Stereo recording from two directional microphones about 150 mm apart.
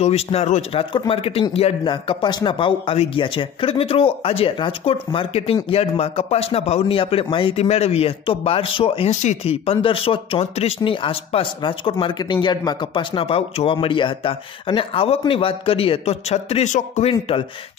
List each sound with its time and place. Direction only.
0.0 s a man's voice: 45° left (ahead or behind)
17.1 s a man's voice: 35° left (ahead or behind)